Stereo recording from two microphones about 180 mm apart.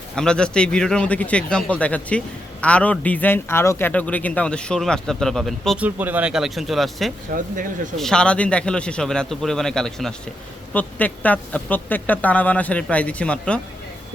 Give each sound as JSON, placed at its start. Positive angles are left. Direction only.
{"t": 0.2, "sound": "speech", "side_deg": 5}
{"t": 7.3, "sound": "speech", "side_deg": -50}
{"t": 7.9, "sound": "speech", "side_deg": 5}